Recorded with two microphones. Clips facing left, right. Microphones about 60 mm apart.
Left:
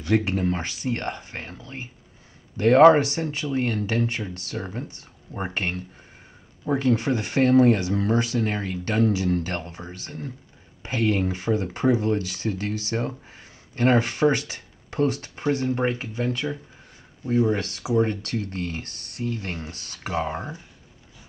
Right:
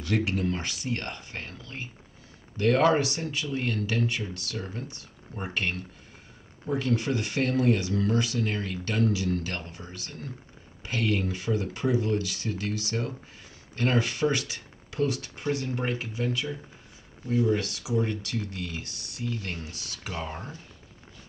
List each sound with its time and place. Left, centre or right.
0.0 s speech: left
19.3 s speech: left
20.2 s speech: left